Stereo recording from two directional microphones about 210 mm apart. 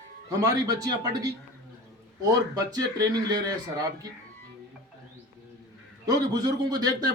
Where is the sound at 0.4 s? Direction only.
15° right (ahead or behind).